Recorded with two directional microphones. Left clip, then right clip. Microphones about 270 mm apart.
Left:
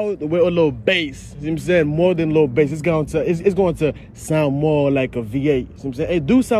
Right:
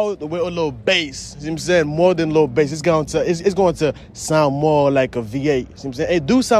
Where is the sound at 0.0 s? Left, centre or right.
Centre.